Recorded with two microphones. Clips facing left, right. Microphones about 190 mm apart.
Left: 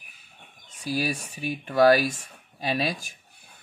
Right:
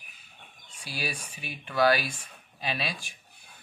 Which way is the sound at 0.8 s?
40° left (ahead or behind).